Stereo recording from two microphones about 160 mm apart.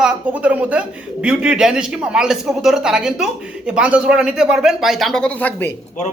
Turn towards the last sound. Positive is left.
turn(degrees=10)  # may be behind; listen again after turning